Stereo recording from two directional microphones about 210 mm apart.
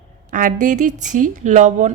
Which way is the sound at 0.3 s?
40° right (ahead or behind).